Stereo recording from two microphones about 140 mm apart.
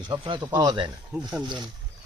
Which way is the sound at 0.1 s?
35° right (ahead or behind).